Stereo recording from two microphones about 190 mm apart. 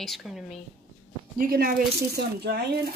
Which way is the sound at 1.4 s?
50° right (ahead or behind).